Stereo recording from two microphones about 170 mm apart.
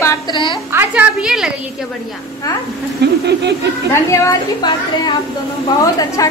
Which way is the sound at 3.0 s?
75° right (ahead or behind).